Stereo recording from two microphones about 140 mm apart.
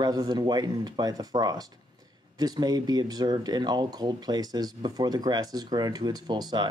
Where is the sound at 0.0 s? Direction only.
30° right (ahead or behind).